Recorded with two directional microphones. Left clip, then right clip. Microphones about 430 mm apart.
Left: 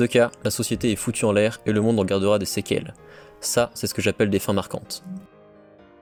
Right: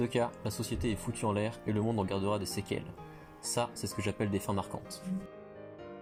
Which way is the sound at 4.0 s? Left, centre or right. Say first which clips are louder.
Left 14 dB; left.